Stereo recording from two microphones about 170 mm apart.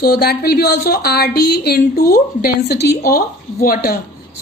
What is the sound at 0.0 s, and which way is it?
A woman's voice, 60° left (ahead or behind).